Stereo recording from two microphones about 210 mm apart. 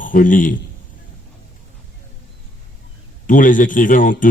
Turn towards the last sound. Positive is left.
turn(degrees=40)  # may be behind; listen again after turning